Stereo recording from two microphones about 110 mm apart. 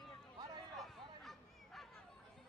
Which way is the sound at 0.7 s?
Centre (ahead or behind).